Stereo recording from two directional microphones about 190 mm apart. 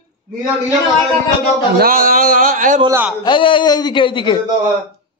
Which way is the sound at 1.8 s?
50° right (ahead or behind).